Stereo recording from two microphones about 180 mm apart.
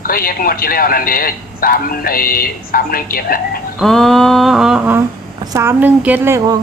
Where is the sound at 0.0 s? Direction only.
55° left (ahead or behind).